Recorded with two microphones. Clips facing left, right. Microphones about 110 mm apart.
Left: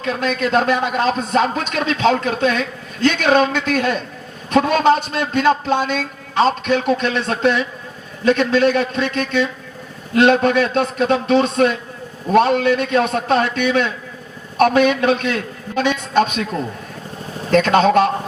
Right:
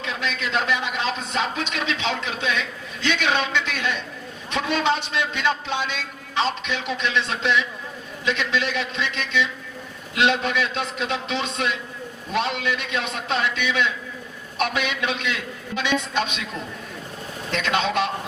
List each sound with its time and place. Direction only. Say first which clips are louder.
0.0 s a man's voice: left 8 dB; 45° left (ahead or behind)